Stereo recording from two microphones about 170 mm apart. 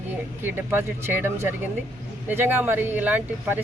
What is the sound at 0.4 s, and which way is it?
Speech, 15° right (ahead or behind).